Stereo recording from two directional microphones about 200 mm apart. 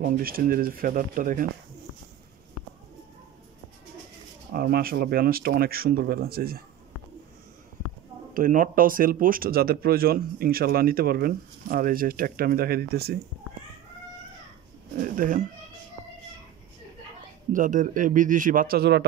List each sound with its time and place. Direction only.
0.0 s speech: 45° right (ahead or behind)
4.6 s speech: 50° right (ahead or behind)
8.3 s speech: 45° right (ahead or behind)
15.0 s cat: 45° right (ahead or behind)
17.5 s speech: 40° right (ahead or behind)